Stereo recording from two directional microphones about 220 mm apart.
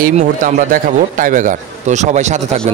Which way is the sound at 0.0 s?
35° right (ahead or behind).